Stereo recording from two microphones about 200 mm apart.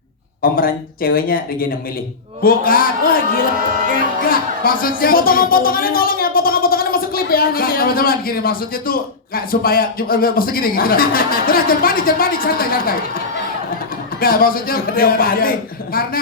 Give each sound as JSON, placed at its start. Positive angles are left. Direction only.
{"t": 0.5, "sound": "speech", "side_deg": 45}
{"t": 4.2, "sound": "speech", "side_deg": 45}